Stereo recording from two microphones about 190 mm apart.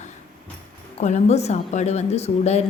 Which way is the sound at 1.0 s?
35° left (ahead or behind).